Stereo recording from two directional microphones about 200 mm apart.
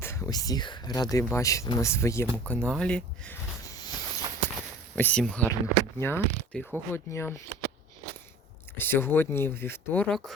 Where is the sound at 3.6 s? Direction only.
15° left (ahead or behind).